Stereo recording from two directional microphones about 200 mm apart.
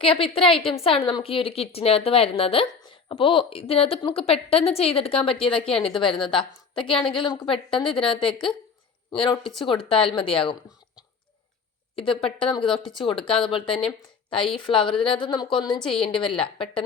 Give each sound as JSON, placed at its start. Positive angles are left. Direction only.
{"t": 0.0, "sound": "a woman's voice", "side_deg": 25}
{"t": 11.9, "sound": "a woman's voice", "side_deg": 25}
{"t": 15.8, "sound": "a woman's voice", "side_deg": 5}
{"t": 16.1, "sound": "a woman's voice", "side_deg": 25}